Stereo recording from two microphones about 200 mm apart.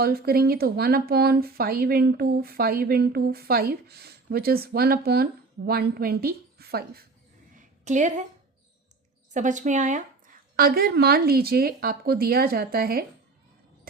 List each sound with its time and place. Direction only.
0.0 s speech: 50° right (ahead or behind)
7.5 s a sound: 40° right (ahead or behind)
9.3 s speech: 40° right (ahead or behind)